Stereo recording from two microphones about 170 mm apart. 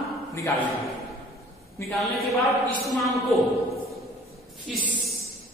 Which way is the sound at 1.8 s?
15° left (ahead or behind).